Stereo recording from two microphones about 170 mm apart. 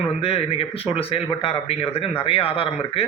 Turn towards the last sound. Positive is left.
turn(degrees=35)  # may be behind; listen again after turning